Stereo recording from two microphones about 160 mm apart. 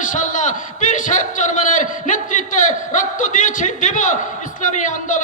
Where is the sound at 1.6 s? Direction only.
50° left (ahead or behind).